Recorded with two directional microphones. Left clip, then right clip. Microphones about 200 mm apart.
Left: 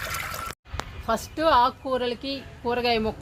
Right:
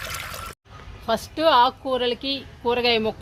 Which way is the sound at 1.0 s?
40° right (ahead or behind).